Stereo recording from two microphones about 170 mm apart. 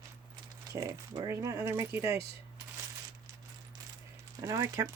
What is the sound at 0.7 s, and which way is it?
Speech, 20° right (ahead or behind).